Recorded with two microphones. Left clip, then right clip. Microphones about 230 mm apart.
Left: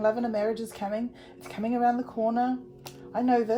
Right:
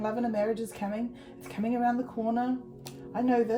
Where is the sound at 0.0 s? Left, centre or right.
Left.